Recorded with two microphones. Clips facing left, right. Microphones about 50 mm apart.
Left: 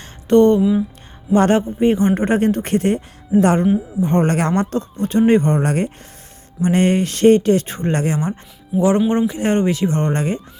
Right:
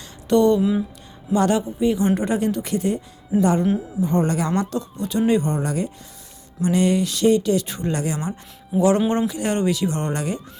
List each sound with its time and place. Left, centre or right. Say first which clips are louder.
0.0 s a sound: left 5 dB; left
0.6 s speech: left 4 dB; centre
1.3 s speech: left 5 dB; left
3.3 s speech: left 5 dB; centre
4.0 s speech: left 3 dB; left
4.6 s speech: left 5 dB; left
8.7 s speech: left 2 dB; centre
9.0 s speech: left 4 dB; left